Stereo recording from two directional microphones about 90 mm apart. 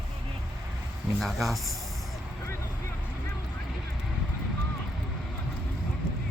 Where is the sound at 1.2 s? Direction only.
Centre (ahead or behind).